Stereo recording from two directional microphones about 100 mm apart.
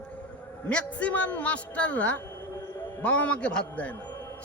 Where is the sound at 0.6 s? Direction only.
10° left (ahead or behind).